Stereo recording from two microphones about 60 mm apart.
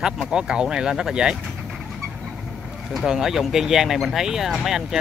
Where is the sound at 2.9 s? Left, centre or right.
Centre.